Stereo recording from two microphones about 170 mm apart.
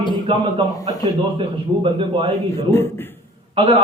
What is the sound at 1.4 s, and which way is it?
A man's voice, 30° right (ahead or behind).